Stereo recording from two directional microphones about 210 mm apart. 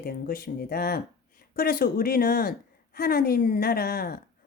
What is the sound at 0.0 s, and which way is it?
A woman's voice, 45° left (ahead or behind).